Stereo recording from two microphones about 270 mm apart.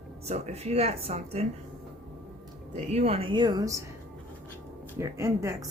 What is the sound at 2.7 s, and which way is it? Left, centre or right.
A woman's voice, right.